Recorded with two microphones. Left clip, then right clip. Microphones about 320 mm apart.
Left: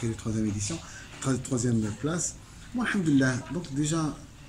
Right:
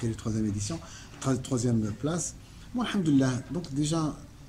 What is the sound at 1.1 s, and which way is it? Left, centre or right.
Speech, centre.